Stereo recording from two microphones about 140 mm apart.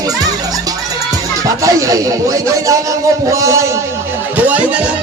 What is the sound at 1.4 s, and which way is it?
Speech, 25° right (ahead or behind).